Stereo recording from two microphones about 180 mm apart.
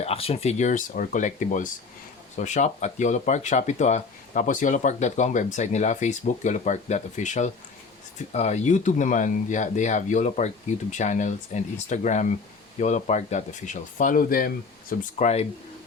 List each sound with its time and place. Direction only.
0.0 s speech: 35° left (ahead or behind); by 15.3 s 50° left (ahead or behind)